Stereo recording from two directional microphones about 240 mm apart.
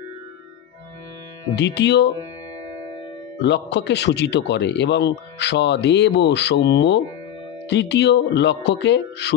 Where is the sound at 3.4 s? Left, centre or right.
Left.